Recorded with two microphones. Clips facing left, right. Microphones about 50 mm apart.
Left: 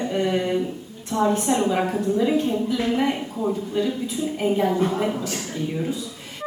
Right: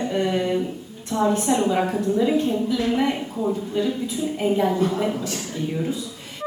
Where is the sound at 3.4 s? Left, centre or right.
Centre.